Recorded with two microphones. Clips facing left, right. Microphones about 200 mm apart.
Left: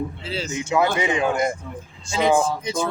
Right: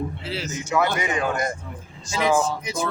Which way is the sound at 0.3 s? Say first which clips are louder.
Left 2 dB; 25° left (ahead or behind).